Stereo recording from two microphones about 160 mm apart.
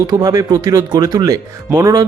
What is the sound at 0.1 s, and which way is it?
Speech, 25° right (ahead or behind).